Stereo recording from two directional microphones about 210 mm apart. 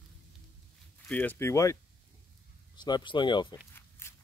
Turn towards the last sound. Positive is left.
turn(degrees=10)  # may be behind; listen again after turning